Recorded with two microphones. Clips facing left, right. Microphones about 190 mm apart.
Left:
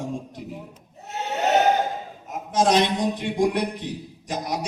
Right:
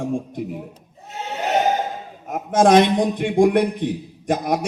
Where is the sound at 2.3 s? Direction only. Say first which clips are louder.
Right 6 dB; 55° right (ahead or behind).